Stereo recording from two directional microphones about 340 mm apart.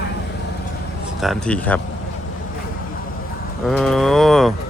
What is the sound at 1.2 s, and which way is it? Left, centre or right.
Speech, centre.